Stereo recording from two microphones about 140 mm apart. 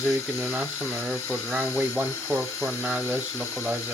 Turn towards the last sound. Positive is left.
turn(degrees=-10)  # may be behind; listen again after turning